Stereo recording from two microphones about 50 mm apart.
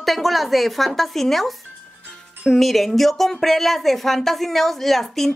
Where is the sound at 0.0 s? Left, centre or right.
Centre.